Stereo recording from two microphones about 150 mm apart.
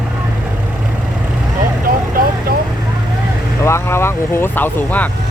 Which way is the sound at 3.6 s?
15° left (ahead or behind).